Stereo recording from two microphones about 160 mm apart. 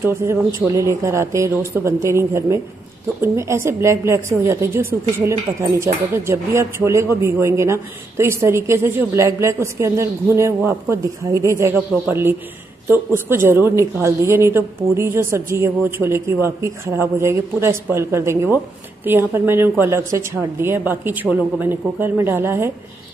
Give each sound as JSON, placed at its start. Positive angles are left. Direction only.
{"t": 0.0, "sound": "a woman's voice", "side_deg": -15}